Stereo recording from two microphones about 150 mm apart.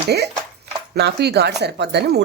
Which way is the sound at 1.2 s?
90° right.